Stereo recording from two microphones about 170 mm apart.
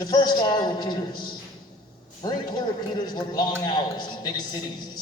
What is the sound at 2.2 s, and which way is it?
A man's voice, 25° left (ahead or behind).